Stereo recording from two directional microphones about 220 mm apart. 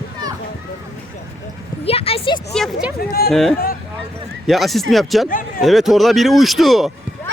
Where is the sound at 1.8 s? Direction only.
25° left (ahead or behind).